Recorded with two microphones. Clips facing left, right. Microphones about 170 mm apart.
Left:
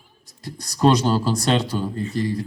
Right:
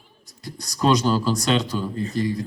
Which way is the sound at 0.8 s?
40° left (ahead or behind).